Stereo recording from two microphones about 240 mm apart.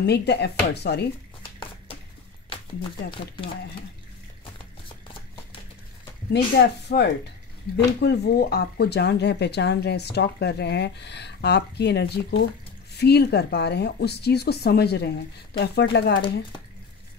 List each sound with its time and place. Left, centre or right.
0.0 s speech: left
2.5 s speech: left
6.3 s speech: left